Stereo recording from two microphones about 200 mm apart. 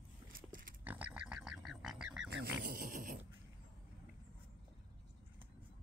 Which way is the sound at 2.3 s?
60° right (ahead or behind).